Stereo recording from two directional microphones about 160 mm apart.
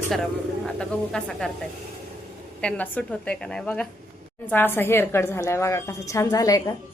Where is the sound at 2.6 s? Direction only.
10° left (ahead or behind).